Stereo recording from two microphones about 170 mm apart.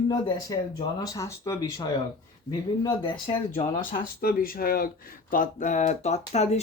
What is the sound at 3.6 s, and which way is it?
Speech, 60° left (ahead or behind).